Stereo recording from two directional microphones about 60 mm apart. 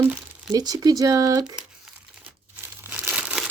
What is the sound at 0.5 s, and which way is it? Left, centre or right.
Speech, right.